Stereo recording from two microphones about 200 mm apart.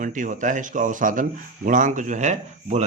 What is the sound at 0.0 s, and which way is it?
Speech, 40° right (ahead or behind).